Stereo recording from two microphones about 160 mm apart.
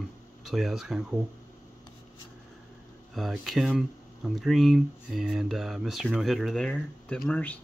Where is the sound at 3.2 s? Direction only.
Centre (ahead or behind).